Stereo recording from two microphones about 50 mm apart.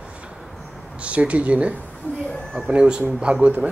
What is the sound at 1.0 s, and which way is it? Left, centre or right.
Speech, right.